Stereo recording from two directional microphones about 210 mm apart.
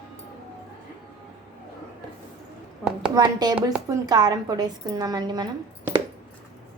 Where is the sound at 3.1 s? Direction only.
20° right (ahead or behind).